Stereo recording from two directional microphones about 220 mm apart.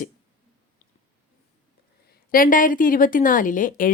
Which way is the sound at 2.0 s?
40° left (ahead or behind).